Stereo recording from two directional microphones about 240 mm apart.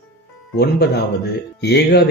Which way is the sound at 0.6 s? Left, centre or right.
Left.